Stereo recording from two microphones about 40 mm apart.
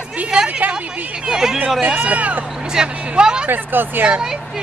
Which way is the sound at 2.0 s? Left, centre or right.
Right.